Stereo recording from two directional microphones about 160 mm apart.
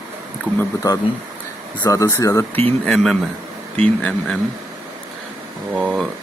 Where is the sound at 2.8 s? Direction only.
Centre (ahead or behind).